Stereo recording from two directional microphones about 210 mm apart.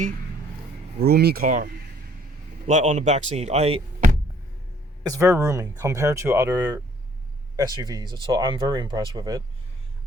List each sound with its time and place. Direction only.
0.9 s speech: 50° right (ahead or behind); by 4.1 s 30° right (ahead or behind)
5.0 s speech: 15° right (ahead or behind)